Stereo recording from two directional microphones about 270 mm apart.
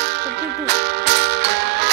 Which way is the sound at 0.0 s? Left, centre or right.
Right.